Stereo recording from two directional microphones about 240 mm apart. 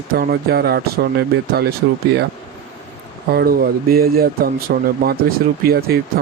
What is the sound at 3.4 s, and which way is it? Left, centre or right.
Speech, right.